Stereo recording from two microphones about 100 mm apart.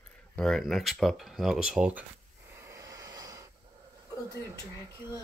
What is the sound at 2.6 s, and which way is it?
Vehicle, 35° right (ahead or behind).